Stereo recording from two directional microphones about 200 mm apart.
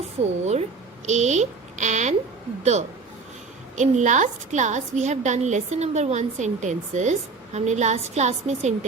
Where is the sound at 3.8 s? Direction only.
40° right (ahead or behind).